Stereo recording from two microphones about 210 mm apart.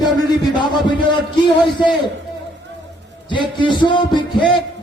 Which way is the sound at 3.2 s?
20° left (ahead or behind).